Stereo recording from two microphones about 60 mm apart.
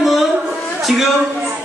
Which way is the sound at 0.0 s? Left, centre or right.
Centre.